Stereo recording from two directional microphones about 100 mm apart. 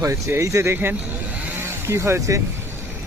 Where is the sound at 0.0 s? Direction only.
30° right (ahead or behind).